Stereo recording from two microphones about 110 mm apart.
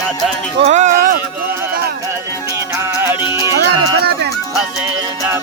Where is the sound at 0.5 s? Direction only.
80° right.